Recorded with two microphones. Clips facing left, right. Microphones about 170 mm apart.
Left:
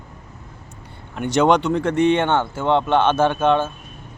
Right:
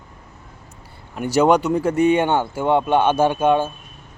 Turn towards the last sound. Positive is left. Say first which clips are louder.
# right 1 dB
turn(degrees=-10)  # may be behind; listen again after turning